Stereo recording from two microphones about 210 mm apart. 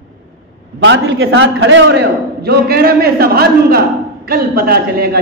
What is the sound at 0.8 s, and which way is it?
A man's voice, 65° right (ahead or behind).